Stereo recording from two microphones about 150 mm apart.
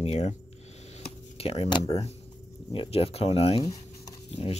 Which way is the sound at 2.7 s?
40° left (ahead or behind).